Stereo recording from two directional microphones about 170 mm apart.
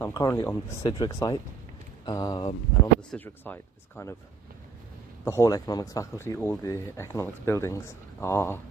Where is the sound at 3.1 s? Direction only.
10° left (ahead or behind).